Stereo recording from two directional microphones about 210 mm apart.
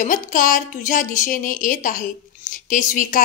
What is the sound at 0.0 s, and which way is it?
A woman's voice, 40° left (ahead or behind).